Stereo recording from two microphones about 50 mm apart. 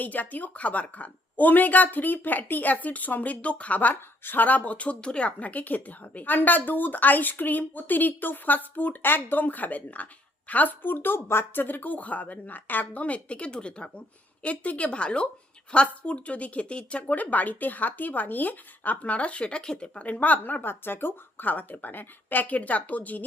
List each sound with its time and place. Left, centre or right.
0.0 s speech: left; by 20.1 s centre
20.1 s speech: left
20.4 s speech: left